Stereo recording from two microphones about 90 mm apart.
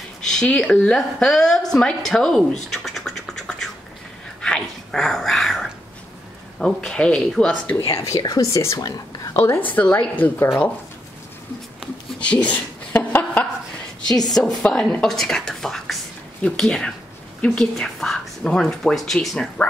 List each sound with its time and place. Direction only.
0.3 s a woman's voice: 10° left (ahead or behind)
4.4 s whispering: 10° left (ahead or behind)
6.6 s speech: 5° left (ahead or behind)
7.7 s speech: 35° left (ahead or behind)
9.7 s a woman's voice: 20° left (ahead or behind)
12.2 s a sound: 15° left (ahead or behind)
14.0 s a woman's voice: 5° left (ahead or behind)